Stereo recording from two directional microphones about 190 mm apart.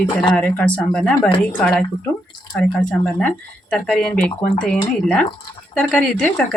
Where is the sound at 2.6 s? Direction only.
5° left (ahead or behind).